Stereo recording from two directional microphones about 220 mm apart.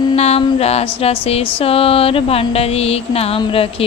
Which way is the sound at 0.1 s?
30° left (ahead or behind).